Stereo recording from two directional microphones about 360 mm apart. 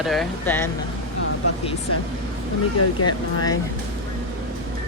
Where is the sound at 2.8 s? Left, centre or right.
Left.